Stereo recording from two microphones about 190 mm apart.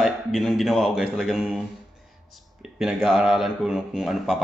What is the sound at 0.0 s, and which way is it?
Speech, centre (ahead or behind).